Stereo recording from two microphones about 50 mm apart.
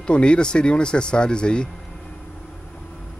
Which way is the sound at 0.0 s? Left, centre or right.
Left.